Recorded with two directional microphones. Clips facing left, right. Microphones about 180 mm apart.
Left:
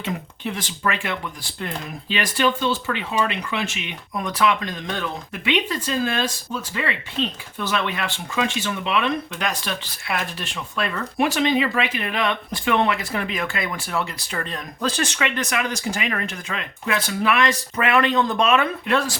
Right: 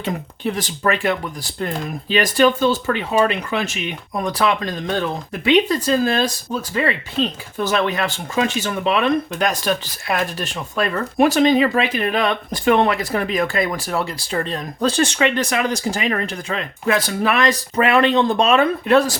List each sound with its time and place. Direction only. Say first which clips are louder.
0.0 s speech: right 5 dB; 40° right (ahead or behind)